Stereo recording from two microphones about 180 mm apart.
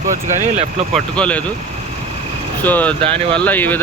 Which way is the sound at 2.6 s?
10° left (ahead or behind).